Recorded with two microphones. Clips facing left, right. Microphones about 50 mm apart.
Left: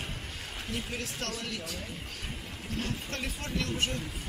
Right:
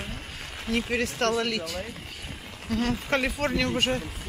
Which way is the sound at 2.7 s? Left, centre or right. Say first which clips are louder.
Right 10 dB; right.